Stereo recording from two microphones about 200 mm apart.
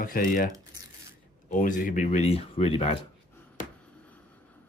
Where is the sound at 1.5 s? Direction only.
40° left (ahead or behind).